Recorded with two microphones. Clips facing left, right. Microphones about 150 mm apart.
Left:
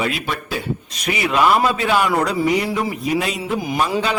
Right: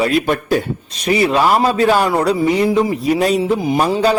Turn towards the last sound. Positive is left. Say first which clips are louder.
# right 6 dB
turn(degrees=-35)  # may be behind; listen again after turning